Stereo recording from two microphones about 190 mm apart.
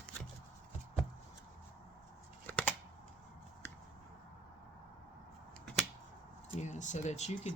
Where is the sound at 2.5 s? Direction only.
10° left (ahead or behind).